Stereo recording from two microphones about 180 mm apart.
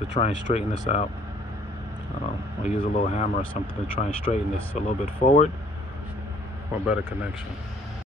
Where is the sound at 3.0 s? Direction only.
40° left (ahead or behind).